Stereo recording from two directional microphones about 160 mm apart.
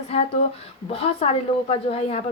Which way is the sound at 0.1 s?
40° left (ahead or behind).